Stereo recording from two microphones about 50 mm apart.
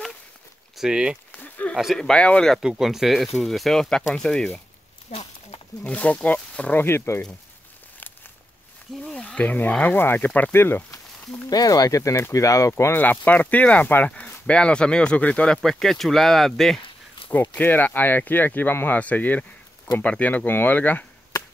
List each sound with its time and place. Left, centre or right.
0.7 s speech: centre
1.6 s a sound: left
2.0 s speech: centre
2.6 s speech: centre
5.9 s speech: left
7.1 s speech: left
9.2 s speech: left
10.5 s speech: left
11.4 s speech: left
12.9 s speech: left
15.6 s speech: centre
17.3 s speech: left
18.9 s speech: left